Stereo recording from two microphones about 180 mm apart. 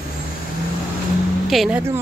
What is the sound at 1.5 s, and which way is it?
Speech, 5° right (ahead or behind).